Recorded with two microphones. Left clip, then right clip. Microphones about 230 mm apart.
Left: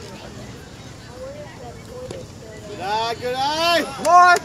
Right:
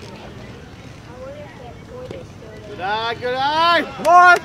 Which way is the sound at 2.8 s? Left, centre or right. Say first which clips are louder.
Right 1 dB; right.